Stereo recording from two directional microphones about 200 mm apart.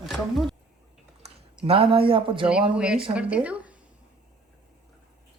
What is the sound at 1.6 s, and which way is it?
Speech, 30° right (ahead or behind).